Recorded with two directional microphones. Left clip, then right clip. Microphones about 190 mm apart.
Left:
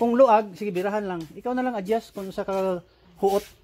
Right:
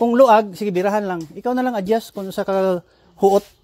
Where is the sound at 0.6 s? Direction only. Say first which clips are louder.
Right 7 dB; 35° right (ahead or behind).